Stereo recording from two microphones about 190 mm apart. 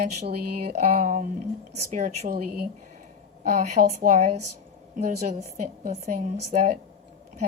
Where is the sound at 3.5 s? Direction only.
40° right (ahead or behind).